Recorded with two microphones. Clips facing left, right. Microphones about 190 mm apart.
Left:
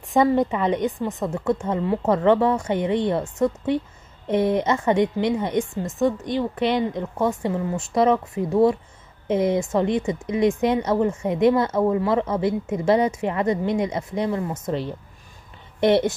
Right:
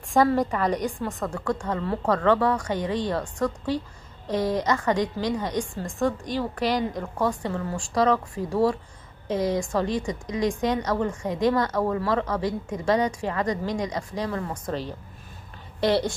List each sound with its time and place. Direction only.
0.9 s a woman's voice: 20° left (ahead or behind)
15.8 s a woman's voice: 20° left (ahead or behind)